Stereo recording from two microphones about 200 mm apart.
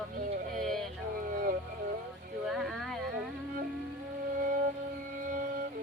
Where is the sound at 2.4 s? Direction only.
Centre (ahead or behind).